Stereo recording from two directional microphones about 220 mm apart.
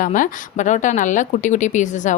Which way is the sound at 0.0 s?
35° left (ahead or behind).